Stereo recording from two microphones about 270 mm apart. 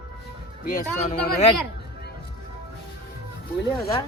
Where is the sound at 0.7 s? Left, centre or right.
Left.